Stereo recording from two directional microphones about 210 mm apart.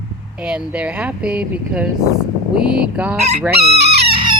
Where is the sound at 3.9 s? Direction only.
25° right (ahead or behind).